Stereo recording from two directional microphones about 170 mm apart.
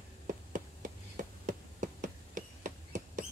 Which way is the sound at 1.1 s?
50° right (ahead or behind).